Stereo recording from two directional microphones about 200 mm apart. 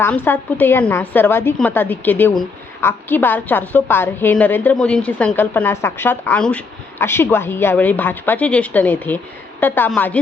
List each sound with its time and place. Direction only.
0.0 s a woman's voice: 10° left (ahead or behind)